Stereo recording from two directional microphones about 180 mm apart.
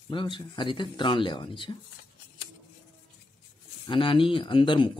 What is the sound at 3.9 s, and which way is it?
Speech, 30° left (ahead or behind).